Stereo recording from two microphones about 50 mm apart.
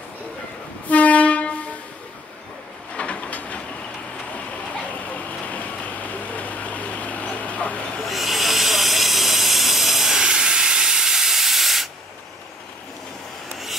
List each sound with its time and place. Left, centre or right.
0.8 s train: left
2.9 s a sound: left
5.1 s vehicle: left
8.0 s hiss: centre